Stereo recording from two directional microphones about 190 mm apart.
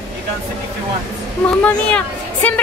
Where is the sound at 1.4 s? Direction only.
5° left (ahead or behind).